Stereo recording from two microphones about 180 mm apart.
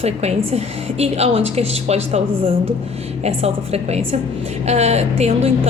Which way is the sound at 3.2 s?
35° right (ahead or behind).